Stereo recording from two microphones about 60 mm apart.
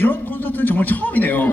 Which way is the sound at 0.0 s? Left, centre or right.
Left.